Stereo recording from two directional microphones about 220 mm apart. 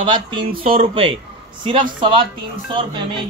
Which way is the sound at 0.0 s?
20° right (ahead or behind).